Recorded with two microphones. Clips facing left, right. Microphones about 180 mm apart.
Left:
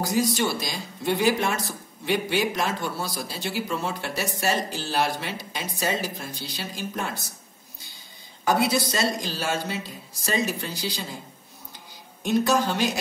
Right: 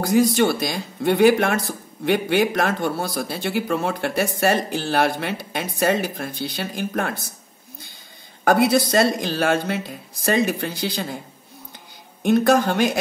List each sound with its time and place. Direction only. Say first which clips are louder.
0.0 s speech: right 7 dB; 55° right (ahead or behind)
8.5 s speech: right 6 dB; 55° right (ahead or behind)
12.2 s speech: right 5 dB; 55° right (ahead or behind)